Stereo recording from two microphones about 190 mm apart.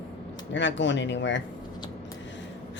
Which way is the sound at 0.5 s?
75° left (ahead or behind).